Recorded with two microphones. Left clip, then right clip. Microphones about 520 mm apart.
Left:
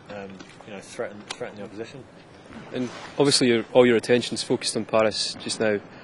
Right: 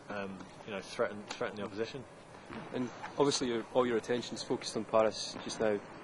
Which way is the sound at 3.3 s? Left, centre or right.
Left.